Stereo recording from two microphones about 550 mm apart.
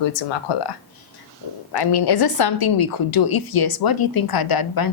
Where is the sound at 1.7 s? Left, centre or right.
Left.